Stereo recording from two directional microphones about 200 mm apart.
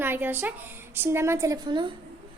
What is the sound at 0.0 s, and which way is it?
A woman's voice, 10° right (ahead or behind).